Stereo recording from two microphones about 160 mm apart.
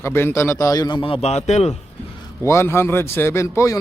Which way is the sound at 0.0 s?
15° left (ahead or behind).